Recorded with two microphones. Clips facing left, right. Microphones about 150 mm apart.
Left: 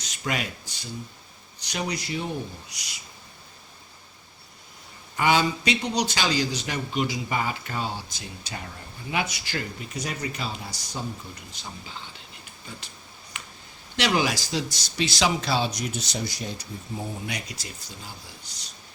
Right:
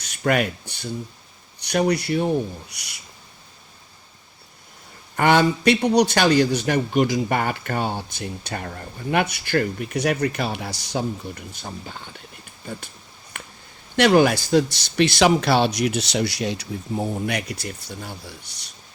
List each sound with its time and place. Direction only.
0.0 s a sound: 60° right (ahead or behind)
1.6 s speech: 60° right (ahead or behind)
5.1 s speech: 55° right (ahead or behind); by 11.4 s 75° right (ahead or behind)
11.5 s speech: 50° right (ahead or behind)
13.3 s a sound: 55° right (ahead or behind)
13.9 s speech: 55° right (ahead or behind)